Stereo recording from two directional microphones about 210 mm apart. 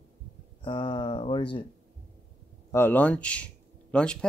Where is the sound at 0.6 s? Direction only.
25° left (ahead or behind).